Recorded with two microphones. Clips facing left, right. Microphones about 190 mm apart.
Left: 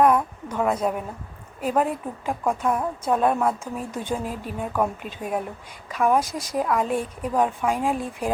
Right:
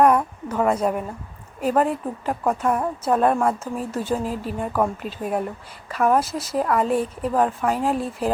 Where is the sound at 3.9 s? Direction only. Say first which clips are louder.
Right 4 dB; 5° right (ahead or behind).